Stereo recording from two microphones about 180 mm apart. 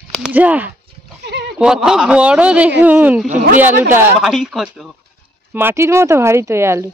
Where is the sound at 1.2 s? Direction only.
70° right (ahead or behind).